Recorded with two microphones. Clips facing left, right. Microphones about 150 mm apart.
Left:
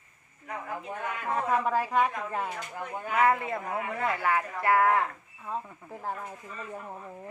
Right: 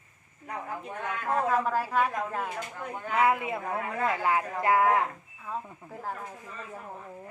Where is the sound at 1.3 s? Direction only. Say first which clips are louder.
Right 1 dB; centre (ahead or behind); by 5.1 s 15° right (ahead or behind).